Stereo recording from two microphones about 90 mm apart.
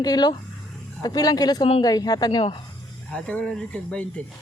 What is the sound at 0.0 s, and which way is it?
A woman's voice, 50° left (ahead or behind).